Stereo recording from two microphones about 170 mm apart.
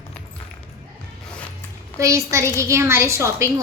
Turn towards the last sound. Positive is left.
turn(degrees=-15)  # may be behind; listen again after turning